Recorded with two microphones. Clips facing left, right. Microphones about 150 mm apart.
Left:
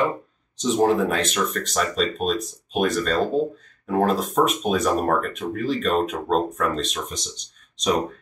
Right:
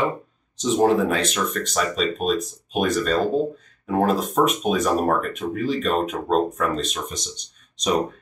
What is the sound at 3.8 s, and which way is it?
Speech, 5° right (ahead or behind).